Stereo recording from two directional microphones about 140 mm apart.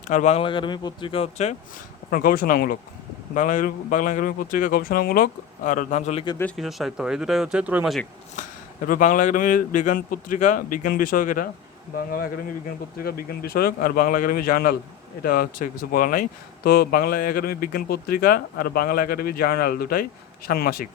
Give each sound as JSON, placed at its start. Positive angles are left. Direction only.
{"t": 0.1, "sound": "speech", "side_deg": 65}
{"t": 0.3, "sound": "speech", "side_deg": 35}
{"t": 2.0, "sound": "speech", "side_deg": 90}
{"t": 3.3, "sound": "a man's voice", "side_deg": 70}
{"t": 6.6, "sound": "speech", "side_deg": 0}
{"t": 8.9, "sound": "a man's voice", "side_deg": 75}